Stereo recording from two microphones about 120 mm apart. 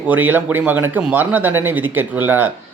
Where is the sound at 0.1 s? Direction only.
15° right (ahead or behind).